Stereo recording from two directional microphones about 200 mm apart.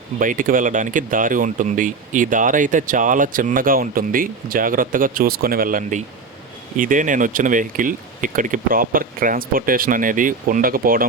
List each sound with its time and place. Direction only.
0.2 s speech: 40° right (ahead or behind)